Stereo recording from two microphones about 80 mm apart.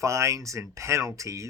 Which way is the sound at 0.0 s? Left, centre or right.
Right.